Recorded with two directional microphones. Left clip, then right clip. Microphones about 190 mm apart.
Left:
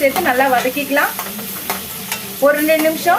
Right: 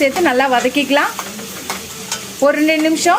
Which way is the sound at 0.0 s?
50° right (ahead or behind).